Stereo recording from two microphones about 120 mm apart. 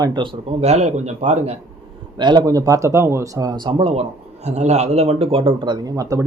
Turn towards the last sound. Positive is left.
turn(degrees=-30)  # may be behind; listen again after turning